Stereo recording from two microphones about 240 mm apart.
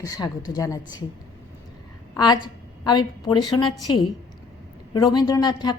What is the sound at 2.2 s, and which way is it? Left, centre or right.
A woman's voice, centre.